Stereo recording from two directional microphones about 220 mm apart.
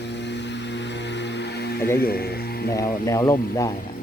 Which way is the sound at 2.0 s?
45° left (ahead or behind).